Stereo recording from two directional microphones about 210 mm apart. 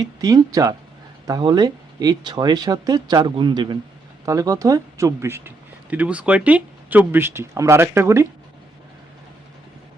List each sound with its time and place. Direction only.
0.0 s speech: 15° right (ahead or behind)